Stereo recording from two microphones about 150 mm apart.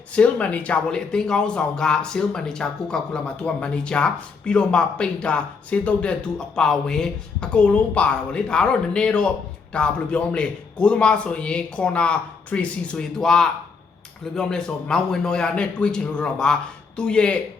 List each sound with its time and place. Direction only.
0.1 s a man's voice: 10° left (ahead or behind)